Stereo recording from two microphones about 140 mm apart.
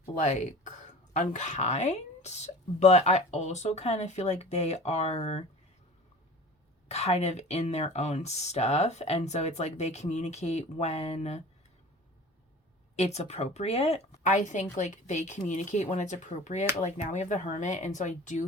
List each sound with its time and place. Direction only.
0.0 s speech: 55° left (ahead or behind)
6.8 s speech: 50° left (ahead or behind)
13.0 s speech: 50° left (ahead or behind)